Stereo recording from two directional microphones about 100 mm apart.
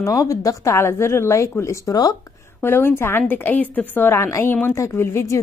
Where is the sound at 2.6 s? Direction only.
25° left (ahead or behind).